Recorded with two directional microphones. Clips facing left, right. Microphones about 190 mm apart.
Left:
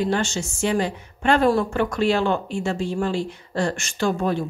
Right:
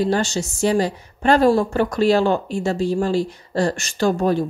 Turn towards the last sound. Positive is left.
turn(degrees=-40)  # may be behind; listen again after turning